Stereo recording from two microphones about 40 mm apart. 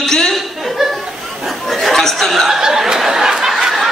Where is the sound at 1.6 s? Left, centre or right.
Centre.